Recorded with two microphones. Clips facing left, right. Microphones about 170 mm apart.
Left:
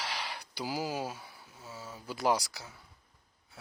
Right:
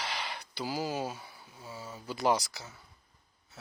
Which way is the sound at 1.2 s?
Centre (ahead or behind).